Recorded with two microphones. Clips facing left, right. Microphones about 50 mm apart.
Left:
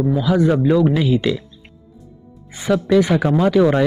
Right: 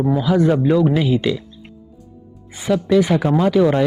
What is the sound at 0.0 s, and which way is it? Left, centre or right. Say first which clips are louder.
Speech: even; right.